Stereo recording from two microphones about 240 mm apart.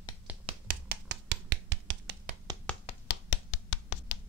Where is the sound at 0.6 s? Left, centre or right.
Right.